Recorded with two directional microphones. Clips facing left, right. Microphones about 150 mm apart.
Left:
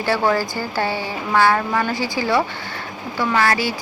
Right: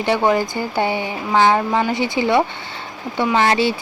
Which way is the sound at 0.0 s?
20° right (ahead or behind).